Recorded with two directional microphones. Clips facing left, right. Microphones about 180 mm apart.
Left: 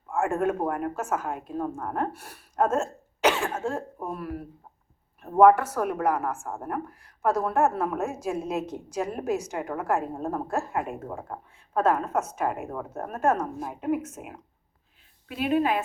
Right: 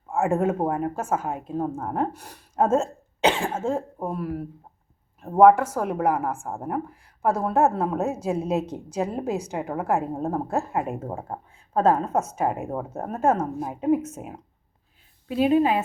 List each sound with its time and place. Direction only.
0.1 s speech: 25° right (ahead or behind)
5.4 s speech: 25° right (ahead or behind)
6.6 s speech: 20° right (ahead or behind)